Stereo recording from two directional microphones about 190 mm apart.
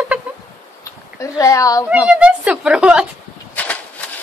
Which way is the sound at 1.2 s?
15° left (ahead or behind).